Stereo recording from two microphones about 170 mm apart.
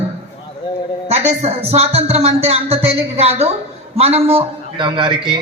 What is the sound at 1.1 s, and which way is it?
A man's voice, 40° right (ahead or behind).